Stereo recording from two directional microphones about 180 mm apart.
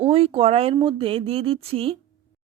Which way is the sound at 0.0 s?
30° right (ahead or behind).